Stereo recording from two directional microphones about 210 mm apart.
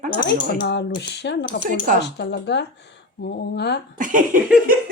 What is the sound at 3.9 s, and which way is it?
Speech, 40° right (ahead or behind).